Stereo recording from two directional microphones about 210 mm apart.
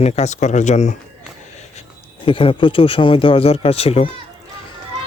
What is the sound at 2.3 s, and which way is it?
Speech, 25° left (ahead or behind).